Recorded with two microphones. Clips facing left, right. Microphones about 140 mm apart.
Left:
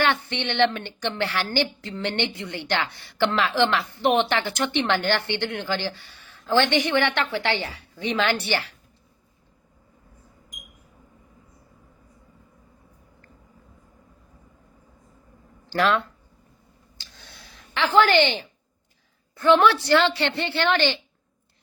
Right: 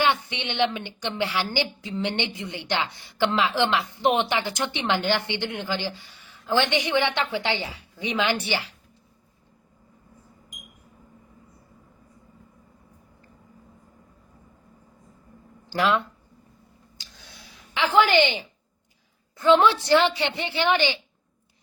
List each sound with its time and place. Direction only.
0.0 s a woman's voice: 15° right (ahead or behind)
15.7 s a woman's voice: 15° right (ahead or behind)
17.0 s a sound: 15° right (ahead or behind)
19.4 s a woman's voice: 20° right (ahead or behind)